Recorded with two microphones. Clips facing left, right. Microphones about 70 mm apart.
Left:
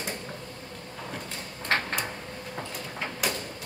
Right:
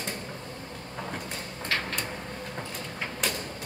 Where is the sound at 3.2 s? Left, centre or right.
Centre.